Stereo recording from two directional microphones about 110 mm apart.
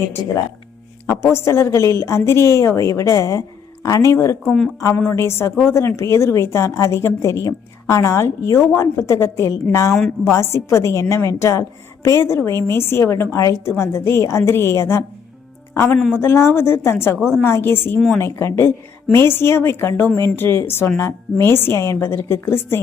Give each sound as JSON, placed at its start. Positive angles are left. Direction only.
{"t": 1.2, "sound": "a woman's voice", "side_deg": 25}
{"t": 4.4, "sound": "a woman's voice", "side_deg": 5}
{"t": 4.9, "sound": "a woman's voice", "side_deg": 20}
{"t": 9.9, "sound": "a woman's voice", "side_deg": 0}
{"t": 10.3, "sound": "a woman's voice", "side_deg": 25}
{"t": 17.2, "sound": "a woman's voice", "side_deg": -5}
{"t": 17.4, "sound": "a woman's voice", "side_deg": 20}